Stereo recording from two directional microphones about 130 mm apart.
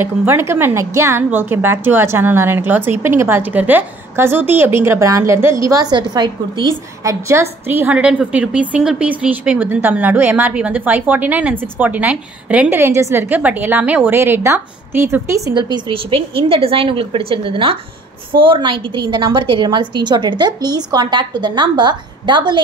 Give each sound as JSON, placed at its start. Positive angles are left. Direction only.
{"t": 0.0, "sound": "a woman's voice", "side_deg": -15}